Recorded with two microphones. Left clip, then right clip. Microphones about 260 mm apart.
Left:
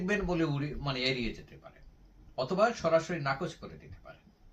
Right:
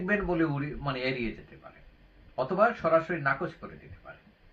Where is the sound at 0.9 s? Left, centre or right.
Centre.